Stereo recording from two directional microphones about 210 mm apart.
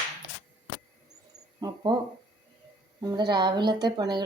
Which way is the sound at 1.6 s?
20° right (ahead or behind).